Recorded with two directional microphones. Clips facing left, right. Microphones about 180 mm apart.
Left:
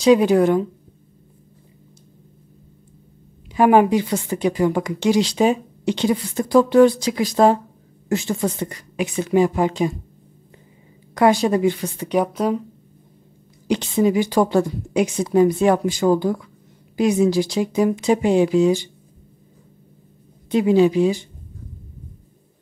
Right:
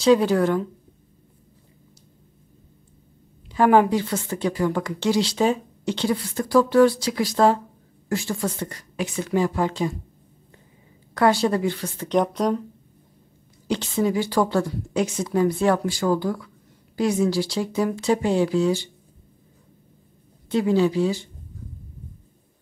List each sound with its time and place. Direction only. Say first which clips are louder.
0.0 s a woman's voice: left 3 dB; 15° left (ahead or behind)
3.5 s a woman's voice: left 3 dB; 15° left (ahead or behind)
11.1 s a woman's voice: left 3 dB; 15° left (ahead or behind)
13.7 s a woman's voice: left 4 dB; 15° left (ahead or behind)
20.4 s a woman's voice: left 4 dB; 15° left (ahead or behind)